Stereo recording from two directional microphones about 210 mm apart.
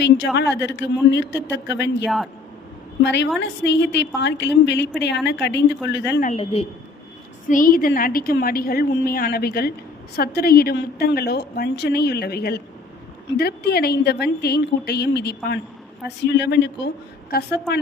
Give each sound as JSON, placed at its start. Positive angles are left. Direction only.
{"t": 0.3, "sound": "a woman's voice", "side_deg": 55}
{"t": 6.2, "sound": "a woman's voice", "side_deg": 30}
{"t": 7.4, "sound": "a woman's voice", "side_deg": 40}